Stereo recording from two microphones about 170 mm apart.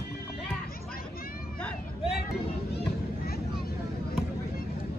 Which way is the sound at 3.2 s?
65° left (ahead or behind).